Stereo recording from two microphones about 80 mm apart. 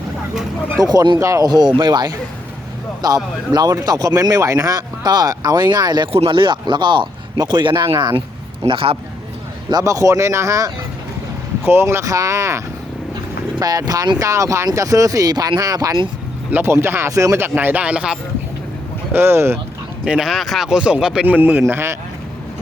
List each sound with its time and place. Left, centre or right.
0.8 s speech: right
1.2 s speech: right
1.5 s speech: right
8.6 s a man's voice: right
9.8 s speech: right
12.0 s speech: right
16.5 s speech: right
17.5 s speech: right
19.1 s speech: right
20.1 s speech: centre
21.2 s speech: right